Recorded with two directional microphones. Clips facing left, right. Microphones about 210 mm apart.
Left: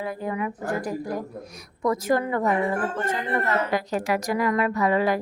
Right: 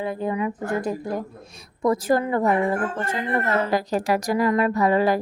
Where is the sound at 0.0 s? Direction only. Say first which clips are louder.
Right 3 dB; 25° right (ahead or behind).